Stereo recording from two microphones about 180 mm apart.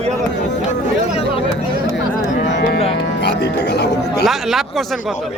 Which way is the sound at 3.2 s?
70° left (ahead or behind).